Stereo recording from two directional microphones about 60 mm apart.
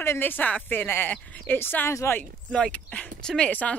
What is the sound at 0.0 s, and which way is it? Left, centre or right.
Speech, left.